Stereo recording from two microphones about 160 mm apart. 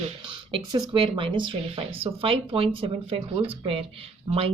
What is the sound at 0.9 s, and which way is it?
A woman's voice, 30° right (ahead or behind).